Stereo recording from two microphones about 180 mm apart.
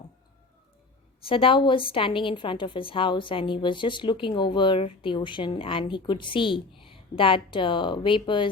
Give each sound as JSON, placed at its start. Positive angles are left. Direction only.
{"t": 1.2, "sound": "a woman's voice", "side_deg": 30}